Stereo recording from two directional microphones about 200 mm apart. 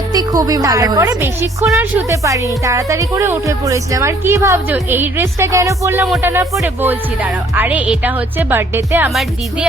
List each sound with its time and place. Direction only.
0.1 s a woman's voice: 20° right (ahead or behind)